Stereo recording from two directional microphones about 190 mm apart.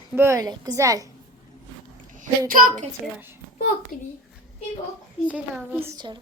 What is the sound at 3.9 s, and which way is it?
Speech, 45° left (ahead or behind).